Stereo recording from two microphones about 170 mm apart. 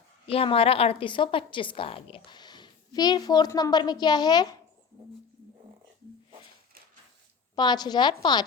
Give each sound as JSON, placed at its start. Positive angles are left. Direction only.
{"t": 0.3, "sound": "a woman's voice", "side_deg": 35}
{"t": 7.5, "sound": "a woman's voice", "side_deg": 25}